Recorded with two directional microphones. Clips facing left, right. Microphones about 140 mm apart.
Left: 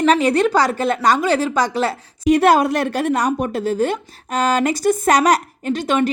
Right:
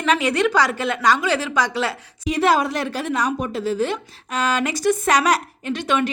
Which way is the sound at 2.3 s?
55° left (ahead or behind).